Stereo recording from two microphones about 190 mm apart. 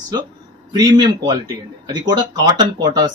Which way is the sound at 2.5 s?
20° right (ahead or behind).